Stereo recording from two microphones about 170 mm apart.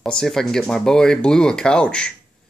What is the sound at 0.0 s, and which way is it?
Speech, 5° left (ahead or behind).